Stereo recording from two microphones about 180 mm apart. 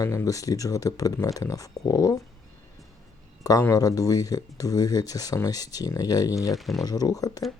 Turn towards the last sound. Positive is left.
turn(degrees=20)  # may be behind; listen again after turning